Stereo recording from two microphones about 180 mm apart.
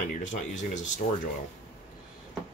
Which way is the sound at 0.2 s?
45° left (ahead or behind).